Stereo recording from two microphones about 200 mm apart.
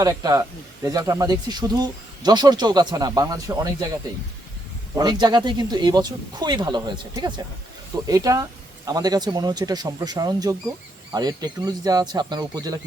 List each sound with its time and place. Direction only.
0.0 s speech: 20° right (ahead or behind)
4.9 s speech: 20° right (ahead or behind)